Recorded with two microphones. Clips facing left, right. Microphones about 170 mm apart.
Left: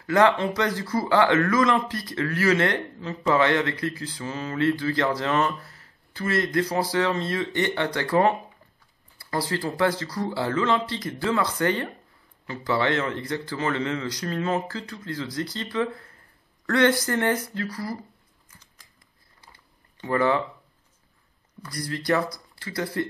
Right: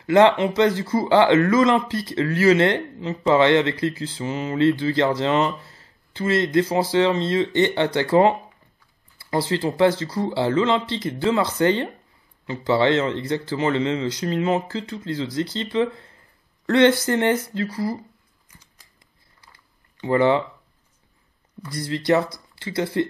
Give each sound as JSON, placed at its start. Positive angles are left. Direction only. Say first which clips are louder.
{"t": 0.0, "sound": "speech", "louder": "right 5 dB", "side_deg": -25}
{"t": 20.0, "sound": "speech", "louder": "right 4 dB", "side_deg": -25}
{"t": 21.6, "sound": "speech", "louder": "right 5 dB", "side_deg": -25}